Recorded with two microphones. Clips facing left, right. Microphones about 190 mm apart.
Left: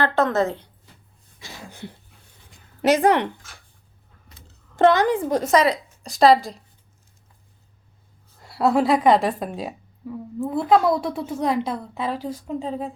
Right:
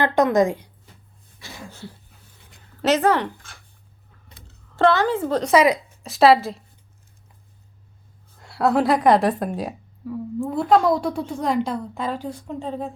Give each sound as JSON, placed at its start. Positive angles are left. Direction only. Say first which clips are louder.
{"t": 0.0, "sound": "a woman's voice", "louder": "right 3 dB", "side_deg": -15}
{"t": 1.4, "sound": "throat clearing", "louder": "even", "side_deg": 20}
{"t": 2.8, "sound": "a woman's voice", "louder": "left 1 dB", "side_deg": 15}
{"t": 4.8, "sound": "a woman's voice", "louder": "left 2 dB", "side_deg": 15}
{"t": 5.5, "sound": "a woman's voice", "louder": "right 3 dB", "side_deg": -10}
{"t": 8.4, "sound": "a woman's voice", "louder": "even", "side_deg": 0}